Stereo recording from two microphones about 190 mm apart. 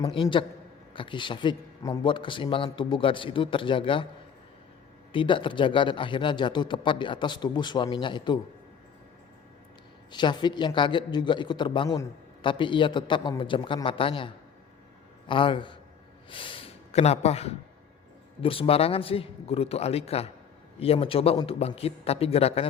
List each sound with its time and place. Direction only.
0.0 s a man's voice: 25° left (ahead or behind)
5.1 s a man's voice: 25° left (ahead or behind)
10.1 s a man's voice: 25° left (ahead or behind)